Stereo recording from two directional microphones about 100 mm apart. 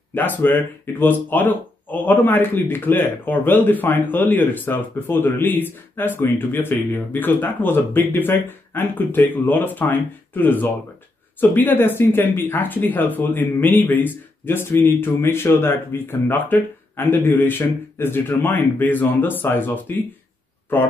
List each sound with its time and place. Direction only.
0.1 s a man's voice: 20° left (ahead or behind)